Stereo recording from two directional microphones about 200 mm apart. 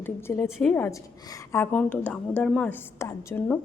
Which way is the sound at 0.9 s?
15° left (ahead or behind).